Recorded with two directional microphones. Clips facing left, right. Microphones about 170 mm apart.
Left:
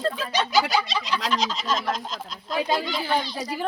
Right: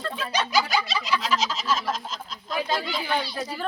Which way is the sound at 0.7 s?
5° right (ahead or behind).